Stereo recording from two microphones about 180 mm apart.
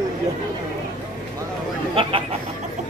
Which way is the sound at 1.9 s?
30° right (ahead or behind).